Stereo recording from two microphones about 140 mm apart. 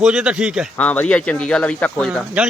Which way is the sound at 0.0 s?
5° right (ahead or behind).